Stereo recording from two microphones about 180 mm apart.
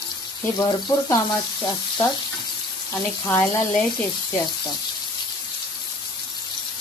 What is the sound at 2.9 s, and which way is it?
Stir, 15° left (ahead or behind).